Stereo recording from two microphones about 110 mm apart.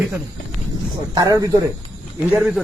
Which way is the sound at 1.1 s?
35° right (ahead or behind).